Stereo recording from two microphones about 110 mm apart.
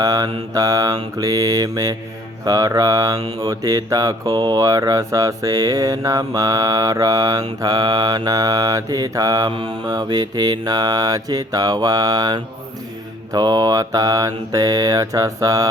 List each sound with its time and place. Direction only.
0.0 s mantra: 35° right (ahead or behind)